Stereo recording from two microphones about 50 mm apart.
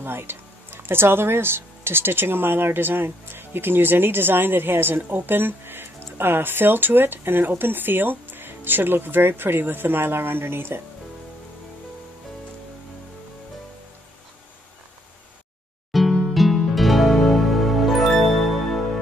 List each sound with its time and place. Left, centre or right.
0.0 s speech: right
15.9 s music: centre